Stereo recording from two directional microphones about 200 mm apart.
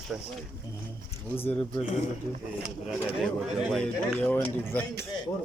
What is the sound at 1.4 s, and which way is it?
Speech, 10° left (ahead or behind).